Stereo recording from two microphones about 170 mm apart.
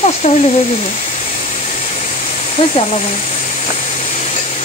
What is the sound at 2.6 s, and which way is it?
Speech, 35° left (ahead or behind).